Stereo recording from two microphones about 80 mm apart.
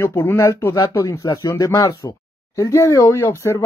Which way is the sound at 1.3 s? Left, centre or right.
Left.